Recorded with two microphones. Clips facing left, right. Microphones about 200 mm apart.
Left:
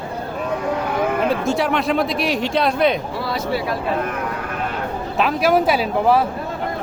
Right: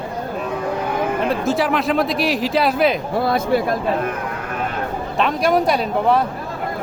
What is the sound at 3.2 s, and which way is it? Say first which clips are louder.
Speech: right 6 dB; 50° right (ahead or behind).